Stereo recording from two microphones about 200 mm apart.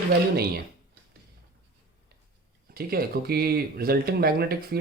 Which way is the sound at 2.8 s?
50° right (ahead or behind).